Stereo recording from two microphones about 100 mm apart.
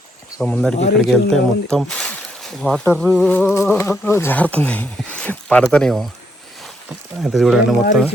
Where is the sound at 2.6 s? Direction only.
15° left (ahead or behind); by 8.0 s centre (ahead or behind).